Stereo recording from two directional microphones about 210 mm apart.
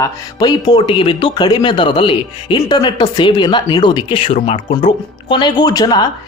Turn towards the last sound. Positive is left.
turn(degrees=20)  # may be behind; listen again after turning